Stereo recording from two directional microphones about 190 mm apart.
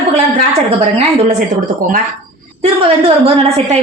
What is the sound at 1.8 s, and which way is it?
Speech, 45° right (ahead or behind).